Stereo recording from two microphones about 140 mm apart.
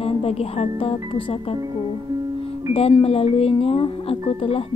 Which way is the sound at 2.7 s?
45° left (ahead or behind).